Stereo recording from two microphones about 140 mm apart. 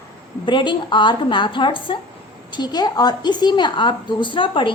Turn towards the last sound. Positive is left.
turn(degrees=35)  # may be behind; listen again after turning